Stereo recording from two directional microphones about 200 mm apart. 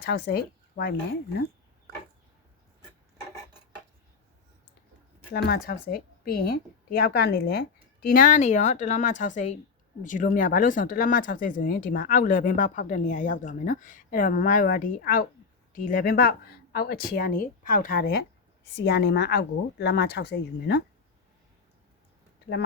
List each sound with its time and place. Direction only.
0.0 s speech: 55° left (ahead or behind)
5.3 s a woman's voice: 50° left (ahead or behind)